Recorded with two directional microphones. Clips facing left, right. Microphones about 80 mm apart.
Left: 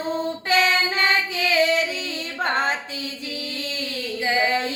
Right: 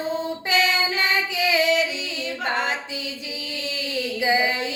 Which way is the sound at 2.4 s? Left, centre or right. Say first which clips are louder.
Left 3 dB; left.